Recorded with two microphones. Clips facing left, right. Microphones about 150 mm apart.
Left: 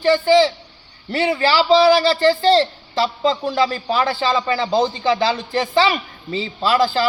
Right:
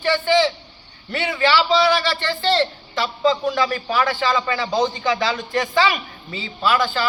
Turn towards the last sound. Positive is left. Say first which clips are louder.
# left 3 dB
turn(degrees=30)  # may be behind; listen again after turning